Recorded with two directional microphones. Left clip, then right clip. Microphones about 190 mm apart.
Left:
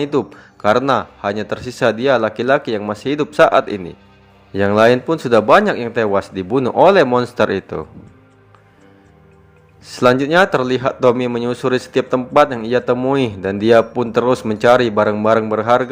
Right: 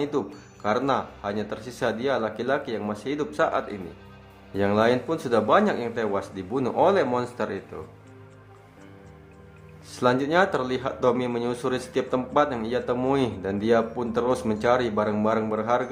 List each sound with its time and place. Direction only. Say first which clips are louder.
0.0 s a man's voice: left 9 dB; 30° left (ahead or behind)
9.8 s a man's voice: left 9 dB; 30° left (ahead or behind)